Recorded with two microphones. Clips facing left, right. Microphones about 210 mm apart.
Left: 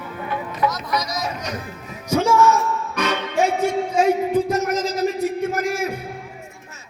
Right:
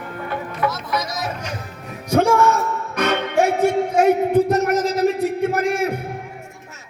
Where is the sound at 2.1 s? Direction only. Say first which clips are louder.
Right 1 dB; 60° right (ahead or behind).